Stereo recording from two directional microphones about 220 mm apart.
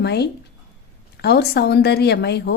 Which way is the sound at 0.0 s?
50° left (ahead or behind).